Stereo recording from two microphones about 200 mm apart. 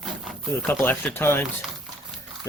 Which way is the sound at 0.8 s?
10° left (ahead or behind).